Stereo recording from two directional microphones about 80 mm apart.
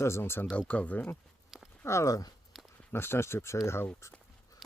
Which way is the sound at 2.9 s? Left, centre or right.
Left.